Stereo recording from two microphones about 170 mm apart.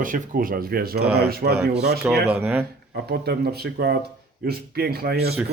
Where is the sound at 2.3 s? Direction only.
10° right (ahead or behind).